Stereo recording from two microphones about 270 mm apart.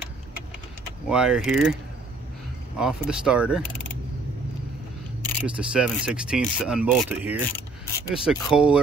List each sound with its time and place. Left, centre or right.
1.0 s speech: centre
2.8 s speech: centre
5.6 s speech: centre